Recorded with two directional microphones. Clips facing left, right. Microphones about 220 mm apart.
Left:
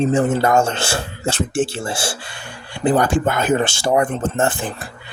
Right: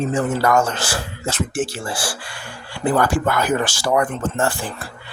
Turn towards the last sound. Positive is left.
turn(degrees=20)  # may be behind; listen again after turning